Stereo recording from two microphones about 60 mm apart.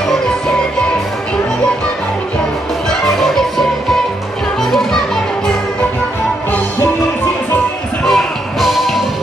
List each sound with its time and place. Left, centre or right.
3.2 s music: centre
4.6 s children playing: centre
8.0 s music: centre